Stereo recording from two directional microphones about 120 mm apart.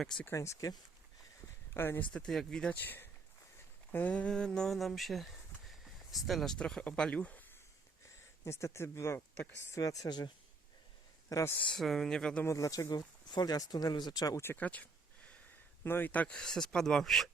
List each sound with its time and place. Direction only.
0.0 s speech: centre (ahead or behind)
0.3 s speech: 25° left (ahead or behind)
2.1 s speech: 5° left (ahead or behind)
8.4 s speech: 25° left (ahead or behind)
11.5 s speech: 10° left (ahead or behind)
12.5 s speech: 30° left (ahead or behind)
14.4 s speech: 15° left (ahead or behind)